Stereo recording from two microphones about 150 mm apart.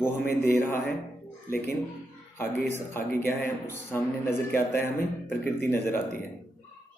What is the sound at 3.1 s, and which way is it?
Speech, 70° left (ahead or behind).